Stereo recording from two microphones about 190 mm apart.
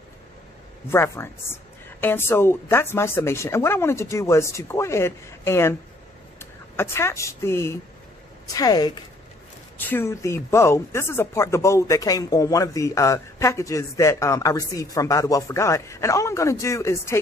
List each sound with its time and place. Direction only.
0.8 s speech: 15° left (ahead or behind)
6.8 s a woman's voice: 15° left (ahead or behind)
9.8 s speech: 10° left (ahead or behind)